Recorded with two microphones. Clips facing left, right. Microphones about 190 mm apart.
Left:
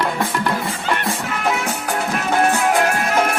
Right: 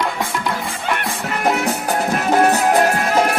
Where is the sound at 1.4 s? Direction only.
40° right (ahead or behind).